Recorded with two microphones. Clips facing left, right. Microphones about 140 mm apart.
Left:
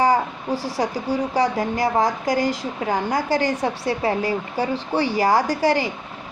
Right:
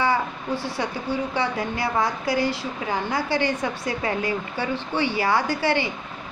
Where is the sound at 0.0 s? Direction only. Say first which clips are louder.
Left 4 dB; 40° left (ahead or behind).